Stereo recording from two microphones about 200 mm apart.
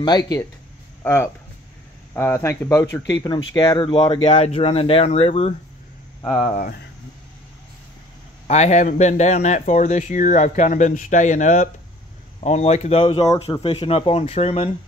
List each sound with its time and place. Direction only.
1.0 s speech: 10° left (ahead or behind); by 6.6 s 35° left (ahead or behind)
8.5 s speech: 35° left (ahead or behind)